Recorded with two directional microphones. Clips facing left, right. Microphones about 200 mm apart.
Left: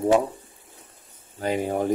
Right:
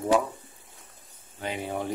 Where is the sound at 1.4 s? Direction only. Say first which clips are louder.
Left 7 dB; 40° left (ahead or behind).